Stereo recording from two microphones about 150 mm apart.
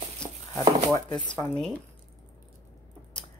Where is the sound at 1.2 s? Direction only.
5° left (ahead or behind).